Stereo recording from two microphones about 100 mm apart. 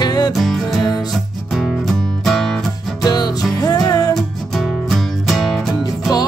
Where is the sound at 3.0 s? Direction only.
40° left (ahead or behind).